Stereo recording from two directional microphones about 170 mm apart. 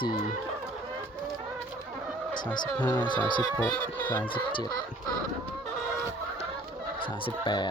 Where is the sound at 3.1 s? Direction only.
25° left (ahead or behind).